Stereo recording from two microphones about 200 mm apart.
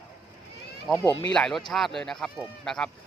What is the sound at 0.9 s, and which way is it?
Speech, centre (ahead or behind).